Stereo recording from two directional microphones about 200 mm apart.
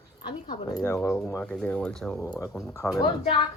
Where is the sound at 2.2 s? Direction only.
15° left (ahead or behind).